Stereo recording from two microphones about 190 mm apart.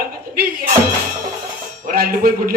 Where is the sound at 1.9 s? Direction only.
50° right (ahead or behind).